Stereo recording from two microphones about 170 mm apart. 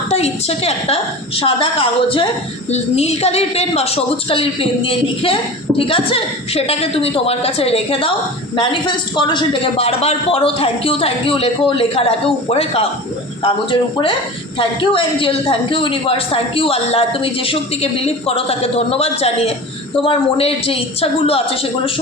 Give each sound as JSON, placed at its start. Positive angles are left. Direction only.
{"t": 0.1, "sound": "a woman's voice", "side_deg": 40}
{"t": 9.1, "sound": "a woman's voice", "side_deg": 30}